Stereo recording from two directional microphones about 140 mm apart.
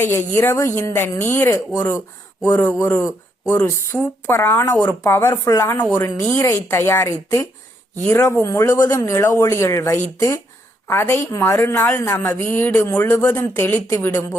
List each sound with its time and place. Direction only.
0.0 s a woman's voice: 15° left (ahead or behind)